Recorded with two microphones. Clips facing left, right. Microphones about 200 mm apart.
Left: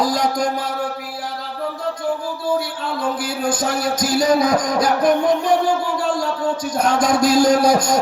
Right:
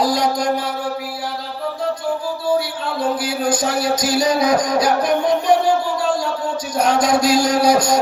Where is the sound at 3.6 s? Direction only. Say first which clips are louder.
Right 1 dB; 50° left (ahead or behind).